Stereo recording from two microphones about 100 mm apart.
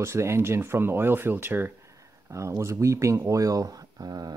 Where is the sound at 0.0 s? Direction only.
25° right (ahead or behind).